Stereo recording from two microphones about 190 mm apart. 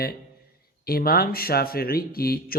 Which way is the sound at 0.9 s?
50° left (ahead or behind).